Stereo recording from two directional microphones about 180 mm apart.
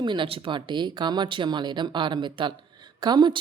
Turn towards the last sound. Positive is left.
turn(degrees=-25)  # may be behind; listen again after turning